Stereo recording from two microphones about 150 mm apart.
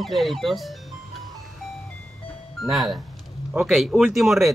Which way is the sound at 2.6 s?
Centre (ahead or behind).